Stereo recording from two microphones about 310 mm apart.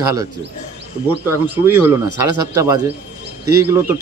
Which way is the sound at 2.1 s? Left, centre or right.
Centre.